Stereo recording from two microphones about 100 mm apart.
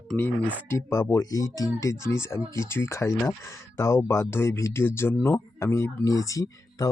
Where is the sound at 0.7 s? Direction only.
30° left (ahead or behind).